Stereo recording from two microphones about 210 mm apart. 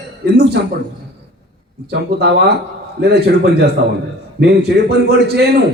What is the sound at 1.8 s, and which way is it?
A man's voice, 50° right (ahead or behind).